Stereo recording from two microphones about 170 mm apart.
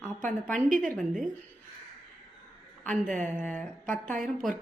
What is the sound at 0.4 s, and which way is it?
Speech, 5° left (ahead or behind).